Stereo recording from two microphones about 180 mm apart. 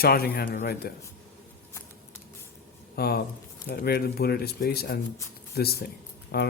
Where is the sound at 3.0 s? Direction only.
60° left (ahead or behind).